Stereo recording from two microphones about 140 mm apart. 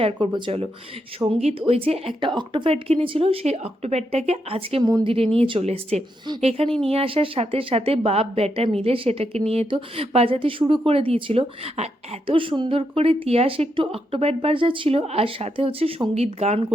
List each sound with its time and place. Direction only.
0.0 s a woman's voice: 35° right (ahead or behind)
4.8 s a woman's voice: 30° right (ahead or behind); by 16.6 s 50° right (ahead or behind)